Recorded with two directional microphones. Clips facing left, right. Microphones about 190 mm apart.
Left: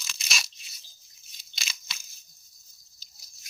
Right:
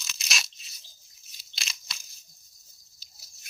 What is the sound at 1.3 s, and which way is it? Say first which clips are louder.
Crunch: even; centre (ahead or behind).